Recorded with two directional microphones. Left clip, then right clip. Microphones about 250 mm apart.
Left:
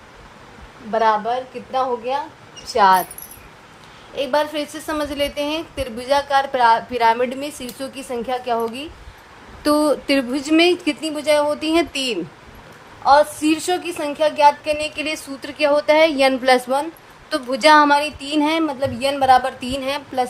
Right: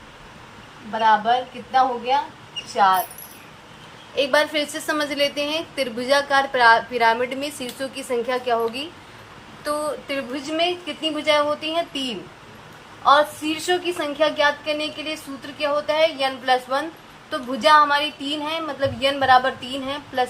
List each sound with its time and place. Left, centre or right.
0.9 s a woman's voice: left
4.1 s a woman's voice: left
9.6 s a woman's voice: left